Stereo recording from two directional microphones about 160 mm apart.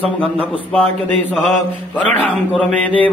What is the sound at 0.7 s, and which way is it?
Mantra, 10° left (ahead or behind).